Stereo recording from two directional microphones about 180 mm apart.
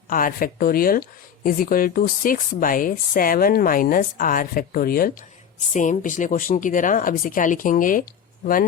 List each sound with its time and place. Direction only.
0.1 s speech: 50° left (ahead or behind)